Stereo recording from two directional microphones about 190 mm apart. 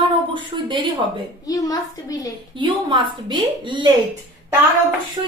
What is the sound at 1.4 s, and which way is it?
Speech, 20° left (ahead or behind).